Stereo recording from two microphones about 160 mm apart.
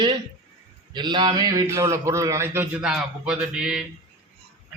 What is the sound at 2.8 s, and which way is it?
Speech, 5° right (ahead or behind).